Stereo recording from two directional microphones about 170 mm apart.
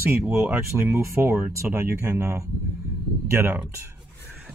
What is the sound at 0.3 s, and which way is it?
Speech, 15° right (ahead or behind).